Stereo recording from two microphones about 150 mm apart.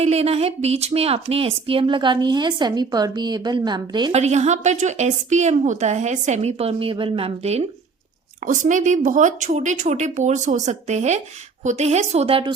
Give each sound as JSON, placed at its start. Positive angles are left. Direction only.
{"t": 0.0, "sound": "speech", "side_deg": -45}
{"t": 4.1, "sound": "a woman's voice", "side_deg": -50}
{"t": 8.4, "sound": "a woman's voice", "side_deg": -55}